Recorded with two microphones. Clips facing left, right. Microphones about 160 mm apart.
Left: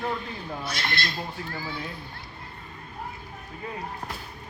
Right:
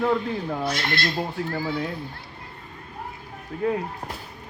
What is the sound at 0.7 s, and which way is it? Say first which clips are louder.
Speech: right 4 dB; 50° right (ahead or behind).